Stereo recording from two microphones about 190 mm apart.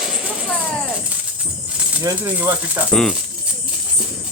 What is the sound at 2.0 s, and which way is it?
Speech, 15° right (ahead or behind).